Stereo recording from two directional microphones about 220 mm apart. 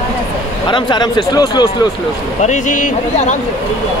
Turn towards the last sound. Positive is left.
turn(degrees=35)  # may be behind; listen again after turning